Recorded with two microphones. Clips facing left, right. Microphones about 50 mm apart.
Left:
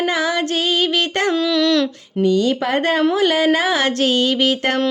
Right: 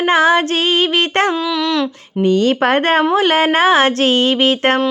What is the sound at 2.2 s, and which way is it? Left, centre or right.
Speech, right.